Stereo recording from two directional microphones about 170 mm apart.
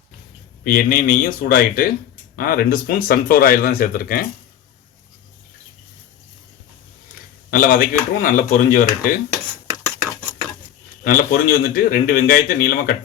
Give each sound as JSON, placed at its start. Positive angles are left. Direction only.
{"t": 0.6, "sound": "a man's voice", "side_deg": 55}
{"t": 7.5, "sound": "a man's voice", "side_deg": 55}
{"t": 11.0, "sound": "a man's voice", "side_deg": 60}